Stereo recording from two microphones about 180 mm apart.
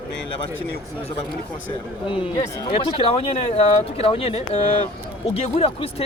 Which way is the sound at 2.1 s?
30° left (ahead or behind).